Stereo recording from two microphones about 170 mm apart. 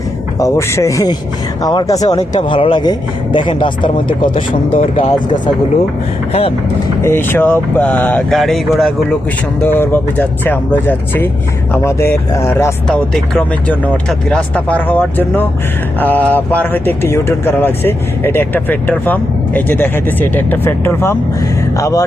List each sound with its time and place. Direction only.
0.3 s speech: 20° left (ahead or behind)
4.2 s speech: 50° left (ahead or behind)
4.9 s speech: 30° left (ahead or behind)
7.0 s speech: 15° left (ahead or behind)
9.6 s speech: 10° left (ahead or behind)
12.9 s speech: centre (ahead or behind); by 22.0 s 20° left (ahead or behind)